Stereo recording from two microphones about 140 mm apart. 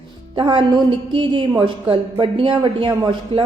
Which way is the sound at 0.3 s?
35° right (ahead or behind).